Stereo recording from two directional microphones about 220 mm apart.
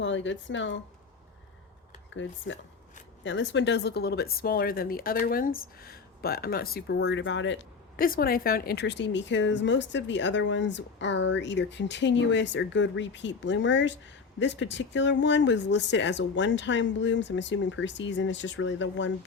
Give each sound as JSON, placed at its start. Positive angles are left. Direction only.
{"t": 0.0, "sound": "speech", "side_deg": 55}
{"t": 2.1, "sound": "speech", "side_deg": 55}
{"t": 7.9, "sound": "speech", "side_deg": 40}